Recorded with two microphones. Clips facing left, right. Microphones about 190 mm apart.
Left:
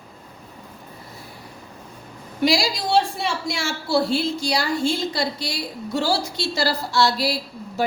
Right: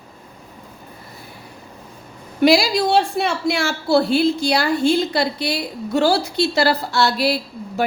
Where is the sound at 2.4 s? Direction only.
60° right (ahead or behind).